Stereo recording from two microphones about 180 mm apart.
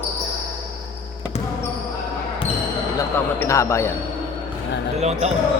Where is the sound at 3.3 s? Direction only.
15° left (ahead or behind).